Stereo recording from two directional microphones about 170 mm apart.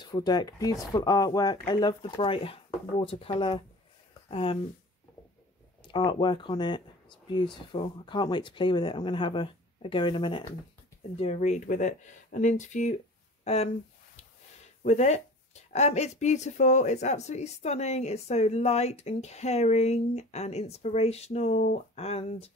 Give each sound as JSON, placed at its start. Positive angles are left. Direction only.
{"t": 0.0, "sound": "speech", "side_deg": 25}
{"t": 5.9, "sound": "speech", "side_deg": 30}
{"t": 13.4, "sound": "a sound", "side_deg": 40}
{"t": 14.8, "sound": "speech", "side_deg": 45}